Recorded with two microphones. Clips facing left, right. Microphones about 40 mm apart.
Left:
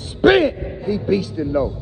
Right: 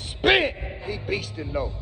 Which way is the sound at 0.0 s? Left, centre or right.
Right.